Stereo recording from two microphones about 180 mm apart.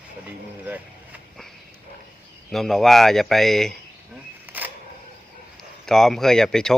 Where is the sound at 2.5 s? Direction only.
Centre (ahead or behind).